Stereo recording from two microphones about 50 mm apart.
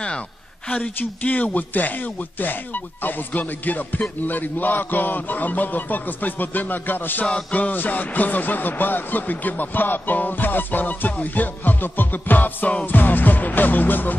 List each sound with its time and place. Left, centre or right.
0.7 s speech: left